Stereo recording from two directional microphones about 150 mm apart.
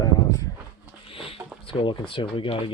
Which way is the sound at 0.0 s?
25° left (ahead or behind).